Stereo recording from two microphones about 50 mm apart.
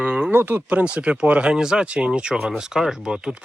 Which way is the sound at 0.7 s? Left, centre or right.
Right.